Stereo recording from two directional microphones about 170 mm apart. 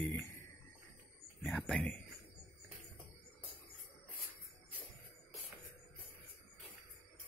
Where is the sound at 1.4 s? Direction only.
5° left (ahead or behind).